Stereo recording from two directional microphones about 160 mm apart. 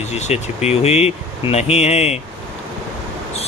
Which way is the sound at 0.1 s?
45° left (ahead or behind).